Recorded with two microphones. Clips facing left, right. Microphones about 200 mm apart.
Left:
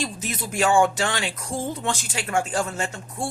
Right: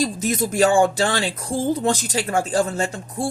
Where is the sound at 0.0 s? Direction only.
40° right (ahead or behind).